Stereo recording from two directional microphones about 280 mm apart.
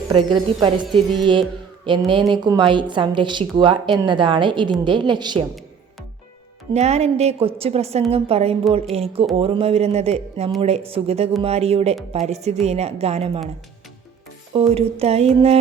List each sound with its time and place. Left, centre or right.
0.1 s speech: centre
6.7 s a woman's voice: right
14.5 s a woman's voice: right